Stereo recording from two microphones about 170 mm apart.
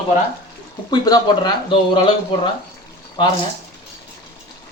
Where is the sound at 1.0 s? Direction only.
25° left (ahead or behind).